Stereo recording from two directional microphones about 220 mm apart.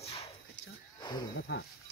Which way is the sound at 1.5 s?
55° left (ahead or behind).